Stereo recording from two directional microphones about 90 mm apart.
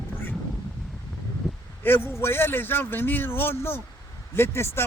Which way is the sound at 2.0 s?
25° left (ahead or behind).